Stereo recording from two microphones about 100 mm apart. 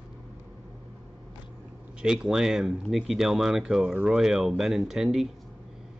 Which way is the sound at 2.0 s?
5° right (ahead or behind).